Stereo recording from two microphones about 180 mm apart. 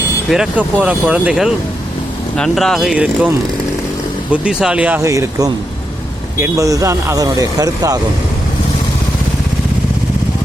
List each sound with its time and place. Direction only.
0.3 s speech: 5° right (ahead or behind); by 7.9 s 20° right (ahead or behind)